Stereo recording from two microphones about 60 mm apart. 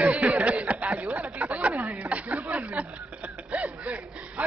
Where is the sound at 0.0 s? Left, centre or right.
Centre.